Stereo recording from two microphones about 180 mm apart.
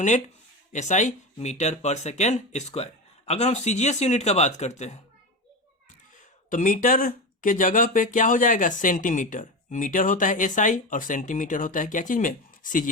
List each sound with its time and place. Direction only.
0.7 s speech: 40° left (ahead or behind)
6.1 s speech: 45° left (ahead or behind)